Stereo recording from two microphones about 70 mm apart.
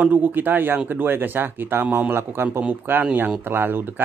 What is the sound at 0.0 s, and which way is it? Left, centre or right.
A man's voice, right.